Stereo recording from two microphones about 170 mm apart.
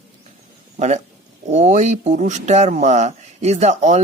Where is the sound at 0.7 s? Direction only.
40° right (ahead or behind).